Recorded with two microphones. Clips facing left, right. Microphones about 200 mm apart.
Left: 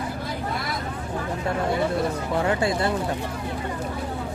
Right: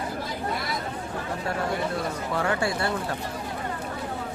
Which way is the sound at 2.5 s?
20° left (ahead or behind).